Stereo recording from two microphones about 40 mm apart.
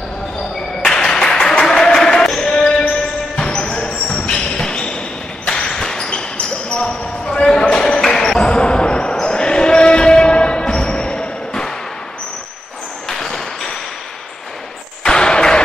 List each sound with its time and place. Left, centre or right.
0.8 s applause: centre
1.5 s a sound: centre
2.4 s music: centre
3.3 s basketball bounce: left
6.0 s basketball bounce: left
8.5 s basketball bounce: left
13.1 s a sound: centre
15.0 s basketball bounce: centre